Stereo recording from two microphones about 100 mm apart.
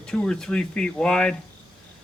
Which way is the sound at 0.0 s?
10° left (ahead or behind).